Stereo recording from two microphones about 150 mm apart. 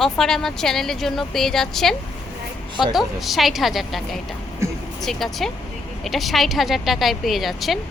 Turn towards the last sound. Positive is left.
turn(degrees=0)  # may be behind; listen again after turning